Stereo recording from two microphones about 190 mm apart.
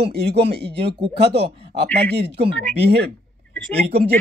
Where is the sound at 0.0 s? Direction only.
60° right (ahead or behind).